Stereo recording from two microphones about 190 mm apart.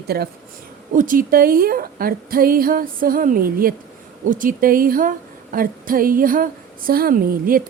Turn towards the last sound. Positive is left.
turn(degrees=-50)  # may be behind; listen again after turning